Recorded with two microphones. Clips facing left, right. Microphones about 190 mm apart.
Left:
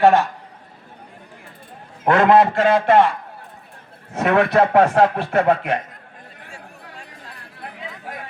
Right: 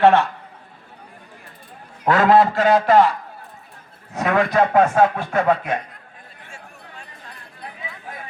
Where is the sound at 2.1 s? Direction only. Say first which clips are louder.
Left 1 dB; 55° left (ahead or behind).